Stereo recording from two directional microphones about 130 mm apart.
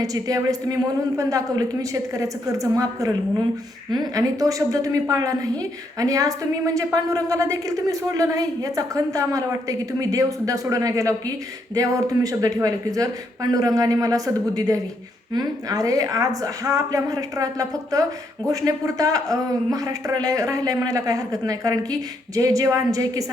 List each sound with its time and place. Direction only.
0.0 s a man's voice: 30° right (ahead or behind)